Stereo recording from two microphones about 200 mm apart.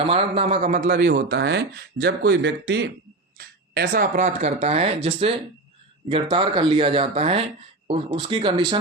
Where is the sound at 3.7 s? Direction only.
50° right (ahead or behind).